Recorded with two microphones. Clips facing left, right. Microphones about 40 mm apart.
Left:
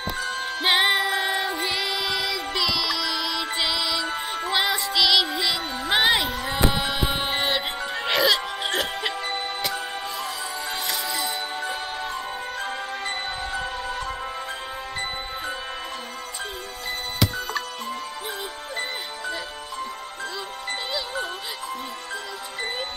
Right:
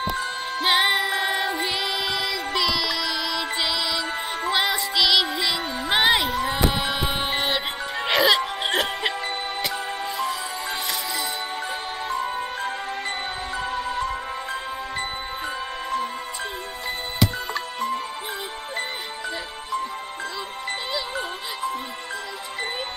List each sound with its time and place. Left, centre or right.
0.6 s music: centre
13.6 s music: centre
17.2 s music: centre